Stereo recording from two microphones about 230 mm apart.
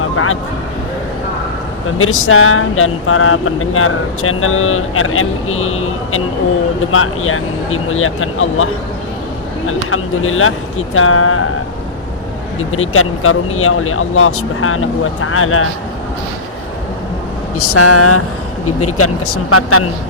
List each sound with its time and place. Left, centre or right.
0.0 s a sound: left
2.0 s speech: left
12.5 s speech: left
17.6 s speech: left